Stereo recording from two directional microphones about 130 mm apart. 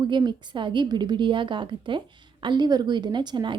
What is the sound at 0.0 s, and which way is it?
A woman's voice, 35° right (ahead or behind).